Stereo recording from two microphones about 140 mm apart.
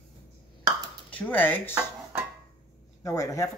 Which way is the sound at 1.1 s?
10° left (ahead or behind).